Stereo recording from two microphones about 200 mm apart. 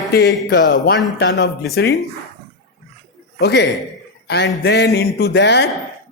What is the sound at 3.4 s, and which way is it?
A man's voice, 55° left (ahead or behind).